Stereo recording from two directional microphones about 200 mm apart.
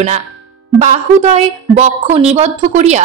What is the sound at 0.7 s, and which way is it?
A woman's voice, 35° right (ahead or behind).